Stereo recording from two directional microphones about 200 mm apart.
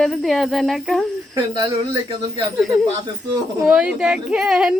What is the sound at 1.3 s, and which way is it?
Speech, 20° right (ahead or behind).